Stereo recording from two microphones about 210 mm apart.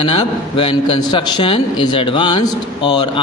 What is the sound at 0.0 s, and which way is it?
A man's voice, 25° left (ahead or behind).